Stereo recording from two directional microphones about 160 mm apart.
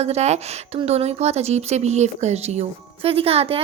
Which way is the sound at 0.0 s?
45° right (ahead or behind).